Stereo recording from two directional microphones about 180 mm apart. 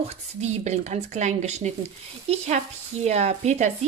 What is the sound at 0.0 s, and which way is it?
Speech, 35° right (ahead or behind).